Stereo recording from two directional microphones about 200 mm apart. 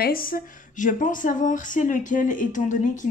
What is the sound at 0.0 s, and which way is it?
Speech, 45° left (ahead or behind).